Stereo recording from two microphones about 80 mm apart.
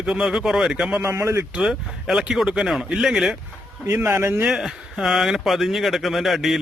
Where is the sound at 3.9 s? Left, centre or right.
Right.